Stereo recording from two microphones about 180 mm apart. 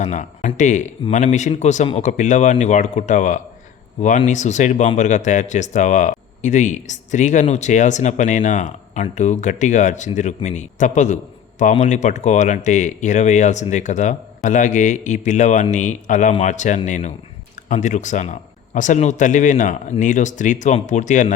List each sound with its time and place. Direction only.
0.0 s speech: 45° left (ahead or behind)